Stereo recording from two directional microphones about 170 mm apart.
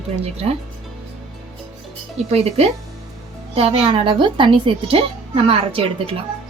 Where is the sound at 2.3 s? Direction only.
35° right (ahead or behind).